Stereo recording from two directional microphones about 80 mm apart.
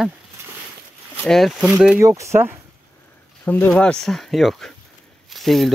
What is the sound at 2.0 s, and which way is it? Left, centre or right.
Speech, right.